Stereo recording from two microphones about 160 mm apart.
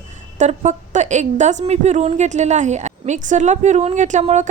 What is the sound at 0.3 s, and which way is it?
A woman's voice, 45° right (ahead or behind).